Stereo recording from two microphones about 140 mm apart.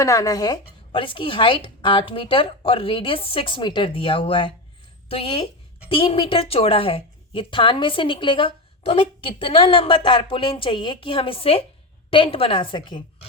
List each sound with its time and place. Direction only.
0.0 s a woman's voice: 25° left (ahead or behind)